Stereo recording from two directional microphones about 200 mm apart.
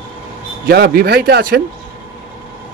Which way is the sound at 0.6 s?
50° right (ahead or behind).